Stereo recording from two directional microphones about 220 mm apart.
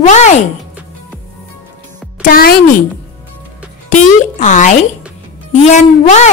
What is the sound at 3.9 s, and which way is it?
Speech, 35° left (ahead or behind).